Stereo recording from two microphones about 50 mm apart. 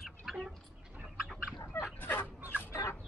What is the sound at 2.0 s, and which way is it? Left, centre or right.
Dog, left.